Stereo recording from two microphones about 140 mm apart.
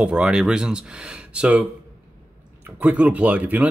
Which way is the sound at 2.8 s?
10° right (ahead or behind).